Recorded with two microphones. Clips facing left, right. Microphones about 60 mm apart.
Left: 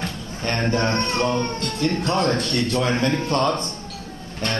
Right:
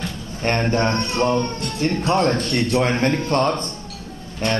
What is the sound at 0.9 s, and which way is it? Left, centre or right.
Speech, left.